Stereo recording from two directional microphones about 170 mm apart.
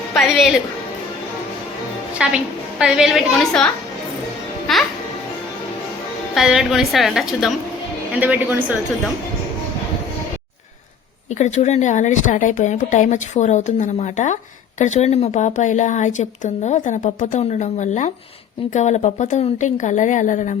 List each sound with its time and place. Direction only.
0.1 s music: centre (ahead or behind)
2.1 s a woman's voice: 5° right (ahead or behind)
4.7 s music: centre (ahead or behind)
6.3 s a woman's voice: 5° right (ahead or behind)
11.3 s a woman's voice: 45° left (ahead or behind)